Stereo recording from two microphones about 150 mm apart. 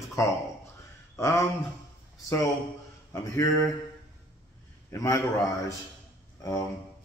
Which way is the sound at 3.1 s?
20° left (ahead or behind).